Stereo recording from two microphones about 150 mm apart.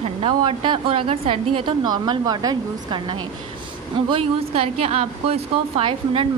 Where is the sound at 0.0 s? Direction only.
35° right (ahead or behind).